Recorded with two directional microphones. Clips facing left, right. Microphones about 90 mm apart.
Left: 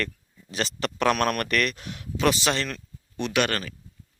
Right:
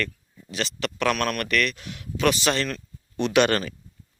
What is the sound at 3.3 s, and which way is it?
Speech, 5° right (ahead or behind).